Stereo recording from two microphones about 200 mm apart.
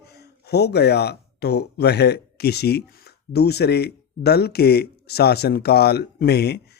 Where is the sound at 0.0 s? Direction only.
55° left (ahead or behind).